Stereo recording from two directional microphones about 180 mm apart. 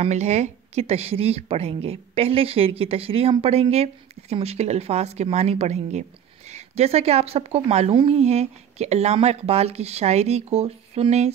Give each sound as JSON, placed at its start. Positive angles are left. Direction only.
{"t": 0.0, "sound": "speech", "side_deg": -40}